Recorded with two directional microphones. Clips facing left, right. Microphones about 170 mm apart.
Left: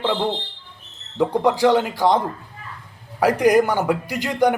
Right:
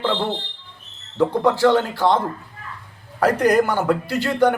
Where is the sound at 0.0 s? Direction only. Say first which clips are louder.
Left 1 dB; 10° left (ahead or behind).